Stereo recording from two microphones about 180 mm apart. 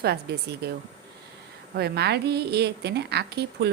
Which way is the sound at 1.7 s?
65° right (ahead or behind).